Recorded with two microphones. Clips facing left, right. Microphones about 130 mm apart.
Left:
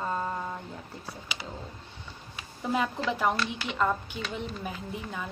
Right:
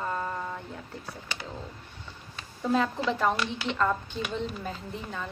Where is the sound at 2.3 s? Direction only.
15° left (ahead or behind).